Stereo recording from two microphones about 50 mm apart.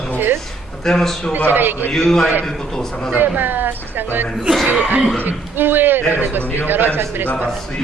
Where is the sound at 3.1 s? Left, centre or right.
Right.